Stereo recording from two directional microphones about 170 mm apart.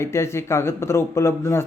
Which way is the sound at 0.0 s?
15° left (ahead or behind).